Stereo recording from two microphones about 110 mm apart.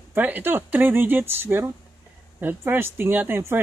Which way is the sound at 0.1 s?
15° right (ahead or behind).